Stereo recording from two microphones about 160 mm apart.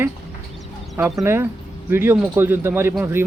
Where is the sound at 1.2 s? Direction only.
15° right (ahead or behind).